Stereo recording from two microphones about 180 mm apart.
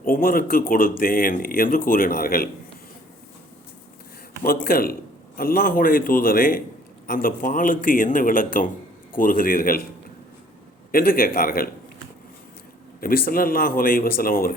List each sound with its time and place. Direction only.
0.0 s speech: 55° left (ahead or behind)
4.4 s a man's voice: 55° left (ahead or behind)
10.9 s speech: 55° left (ahead or behind)
13.0 s speech: 55° left (ahead or behind)